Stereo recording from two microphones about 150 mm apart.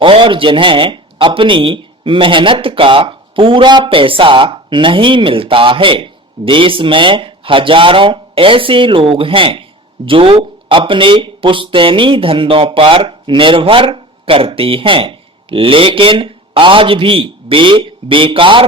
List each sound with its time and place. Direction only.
0.0 s a man's voice: 35° right (ahead or behind)